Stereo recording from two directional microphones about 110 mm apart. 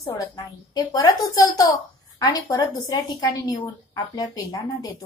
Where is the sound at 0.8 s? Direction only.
35° left (ahead or behind).